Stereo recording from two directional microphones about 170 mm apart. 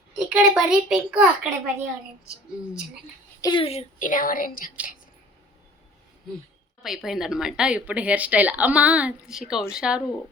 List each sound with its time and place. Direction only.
0.3 s speech: 5° right (ahead or behind)
3.4 s speech: 30° left (ahead or behind); by 4.7 s 55° left (ahead or behind)
6.8 s speech: centre (ahead or behind)